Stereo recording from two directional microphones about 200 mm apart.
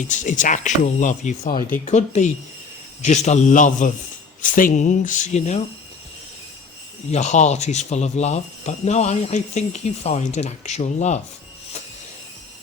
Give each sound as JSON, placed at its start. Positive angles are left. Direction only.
{"t": 0.0, "sound": "speech", "side_deg": 40}
{"t": 7.1, "sound": "speech", "side_deg": 35}